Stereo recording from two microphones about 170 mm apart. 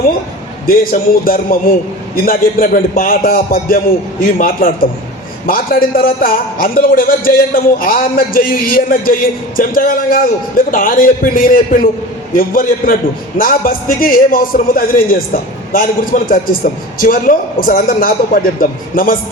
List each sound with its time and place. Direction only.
0.6 s a man's voice: 60° left (ahead or behind)